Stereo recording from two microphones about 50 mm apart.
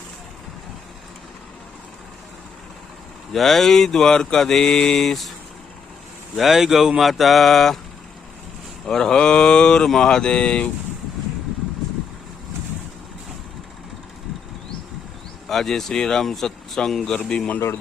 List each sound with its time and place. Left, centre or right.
3.3 s speech: centre
6.3 s mantra: centre
8.9 s speech: centre
15.4 s speech: centre
17.2 s speech: centre